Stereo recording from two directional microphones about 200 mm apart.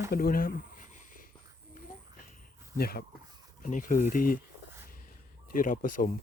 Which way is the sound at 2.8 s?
50° left (ahead or behind).